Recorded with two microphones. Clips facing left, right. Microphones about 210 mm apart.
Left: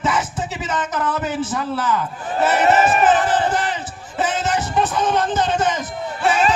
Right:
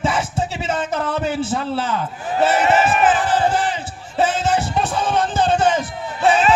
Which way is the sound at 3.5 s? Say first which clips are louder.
Right 1 dB; 30° right (ahead or behind).